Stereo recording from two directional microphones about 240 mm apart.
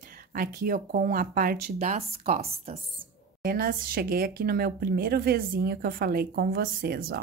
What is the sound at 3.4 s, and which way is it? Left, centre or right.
Speech, right.